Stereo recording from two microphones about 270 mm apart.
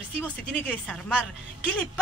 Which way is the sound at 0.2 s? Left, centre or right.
Centre.